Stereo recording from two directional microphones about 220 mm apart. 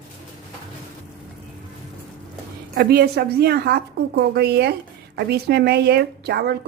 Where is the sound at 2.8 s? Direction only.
45° right (ahead or behind).